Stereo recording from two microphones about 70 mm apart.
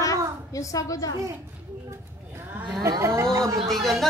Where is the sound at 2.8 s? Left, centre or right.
Right.